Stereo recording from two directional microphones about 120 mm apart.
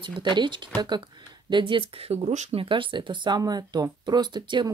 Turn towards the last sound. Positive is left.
turn(degrees=-40)  # may be behind; listen again after turning